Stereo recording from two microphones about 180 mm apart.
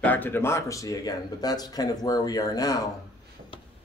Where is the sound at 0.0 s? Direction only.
10° left (ahead or behind).